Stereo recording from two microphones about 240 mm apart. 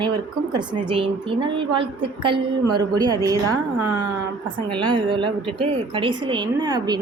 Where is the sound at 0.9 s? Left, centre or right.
Right.